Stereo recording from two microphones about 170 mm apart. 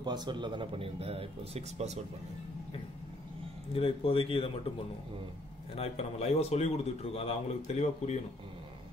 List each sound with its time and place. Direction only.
0.0 s speech: 25° right (ahead or behind)
3.7 s a man's voice: 35° left (ahead or behind)
5.8 s a man's voice: 40° left (ahead or behind)